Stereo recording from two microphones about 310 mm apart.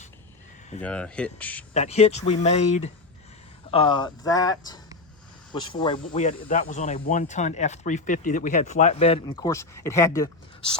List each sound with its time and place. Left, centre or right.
0.8 s speech: centre
1.7 s speech: left